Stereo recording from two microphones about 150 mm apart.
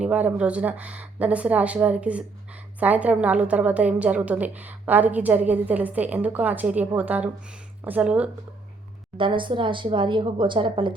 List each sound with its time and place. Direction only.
0.0 s a woman's voice: 10° right (ahead or behind)
9.1 s speech: 35° right (ahead or behind)